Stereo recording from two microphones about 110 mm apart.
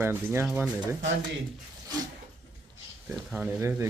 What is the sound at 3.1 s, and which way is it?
Speech, 10° right (ahead or behind).